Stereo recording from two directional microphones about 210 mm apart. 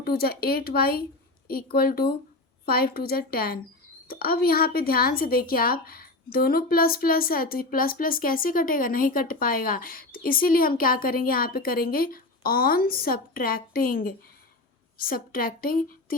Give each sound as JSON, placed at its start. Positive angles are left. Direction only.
{"t": 0.0, "sound": "a woman's voice", "side_deg": 45}